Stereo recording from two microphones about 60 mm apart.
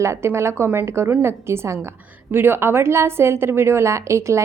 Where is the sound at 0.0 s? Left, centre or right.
Right.